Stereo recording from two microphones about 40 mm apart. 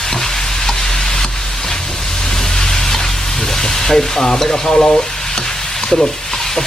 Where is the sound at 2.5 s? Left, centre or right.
Centre.